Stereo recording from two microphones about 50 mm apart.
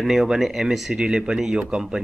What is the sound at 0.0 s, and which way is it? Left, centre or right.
Speech, centre.